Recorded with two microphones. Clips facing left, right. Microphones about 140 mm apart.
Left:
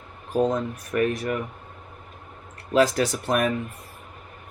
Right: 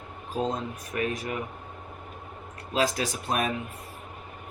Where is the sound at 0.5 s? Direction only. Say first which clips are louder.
Left 6 dB; 55° left (ahead or behind).